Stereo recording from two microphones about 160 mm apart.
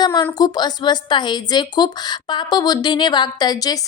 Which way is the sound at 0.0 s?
25° left (ahead or behind).